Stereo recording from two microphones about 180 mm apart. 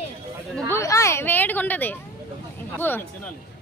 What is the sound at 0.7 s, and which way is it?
Speech, 15° left (ahead or behind).